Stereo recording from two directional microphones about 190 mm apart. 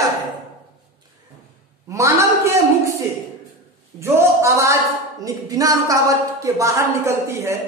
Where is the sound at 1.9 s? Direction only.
15° right (ahead or behind).